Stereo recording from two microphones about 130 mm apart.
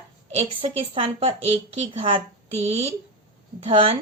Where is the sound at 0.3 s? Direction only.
50° right (ahead or behind).